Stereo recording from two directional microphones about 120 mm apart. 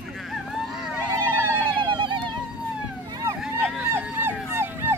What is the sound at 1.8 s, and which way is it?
Vehicle, 40° right (ahead or behind).